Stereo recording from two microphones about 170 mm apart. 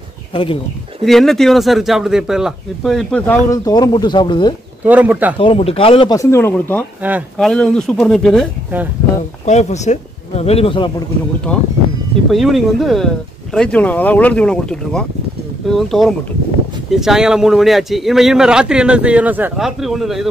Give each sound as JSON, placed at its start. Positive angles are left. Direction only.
{"t": 0.3, "sound": "speech", "side_deg": 30}
{"t": 1.0, "sound": "a man's voice", "side_deg": 0}
{"t": 3.4, "sound": "speech", "side_deg": 20}
{"t": 4.8, "sound": "speech", "side_deg": -10}
{"t": 5.4, "sound": "speech", "side_deg": 35}
{"t": 6.1, "sound": "speech", "side_deg": 15}
{"t": 7.0, "sound": "speech", "side_deg": -10}
{"t": 7.3, "sound": "a man's voice", "side_deg": 5}
{"t": 9.5, "sound": "speech", "side_deg": 40}
{"t": 12.3, "sound": "a man's voice", "side_deg": 0}